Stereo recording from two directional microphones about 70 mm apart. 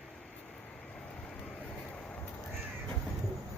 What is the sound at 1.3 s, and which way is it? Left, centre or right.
Vehicle, centre.